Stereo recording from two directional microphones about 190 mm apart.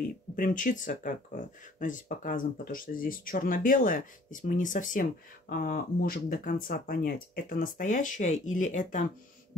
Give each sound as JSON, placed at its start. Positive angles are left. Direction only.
{"t": 0.4, "sound": "speech", "side_deg": 45}